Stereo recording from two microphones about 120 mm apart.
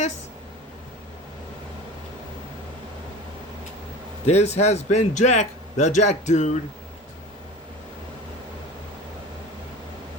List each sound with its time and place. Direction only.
4.3 s a man's voice: 65° left (ahead or behind)